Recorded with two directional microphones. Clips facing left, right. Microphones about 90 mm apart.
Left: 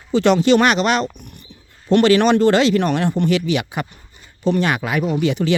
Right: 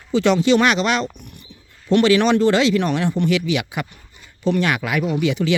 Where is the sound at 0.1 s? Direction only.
50° left (ahead or behind).